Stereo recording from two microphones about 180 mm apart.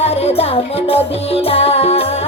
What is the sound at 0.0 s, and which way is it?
Music, 35° left (ahead or behind).